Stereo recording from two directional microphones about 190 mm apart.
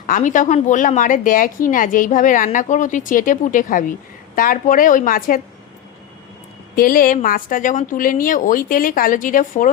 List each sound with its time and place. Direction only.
0.1 s speech: 40° left (ahead or behind)
6.7 s speech: 50° left (ahead or behind)